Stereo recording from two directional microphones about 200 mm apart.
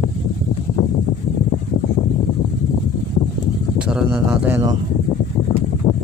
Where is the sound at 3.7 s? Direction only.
5° right (ahead or behind).